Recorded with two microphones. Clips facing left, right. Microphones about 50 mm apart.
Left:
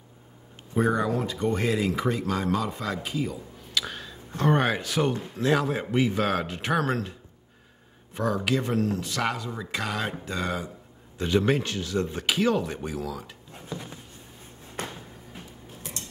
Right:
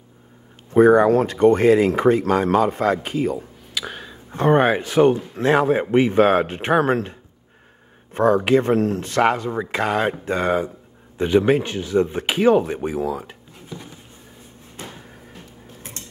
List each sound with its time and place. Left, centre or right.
0.7 s speech: right
1.6 s speech: right
3.7 s speech: centre; by 10.7 s right
11.1 s speech: right